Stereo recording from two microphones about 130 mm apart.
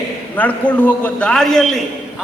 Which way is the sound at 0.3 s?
10° left (ahead or behind).